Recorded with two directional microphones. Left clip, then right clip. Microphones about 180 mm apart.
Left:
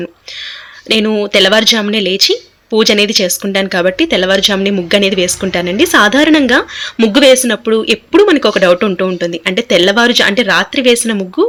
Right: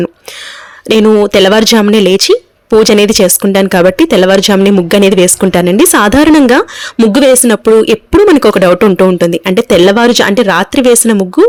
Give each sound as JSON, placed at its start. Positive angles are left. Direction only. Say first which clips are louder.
{"t": 0.9, "sound": "speech", "louder": "right 6 dB", "side_deg": -65}